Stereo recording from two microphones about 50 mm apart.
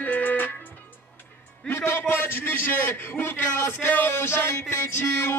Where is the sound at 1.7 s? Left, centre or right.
Left.